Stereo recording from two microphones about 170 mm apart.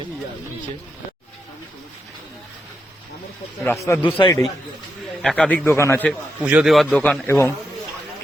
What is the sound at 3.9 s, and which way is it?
Speech, 15° left (ahead or behind).